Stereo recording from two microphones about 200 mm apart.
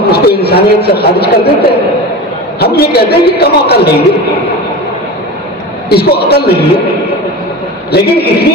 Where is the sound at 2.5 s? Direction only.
55° left (ahead or behind).